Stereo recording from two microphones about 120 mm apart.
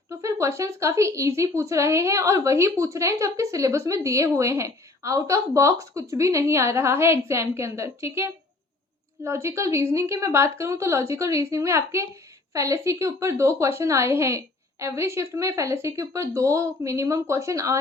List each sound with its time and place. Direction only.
0.1 s a woman's voice: 25° right (ahead or behind)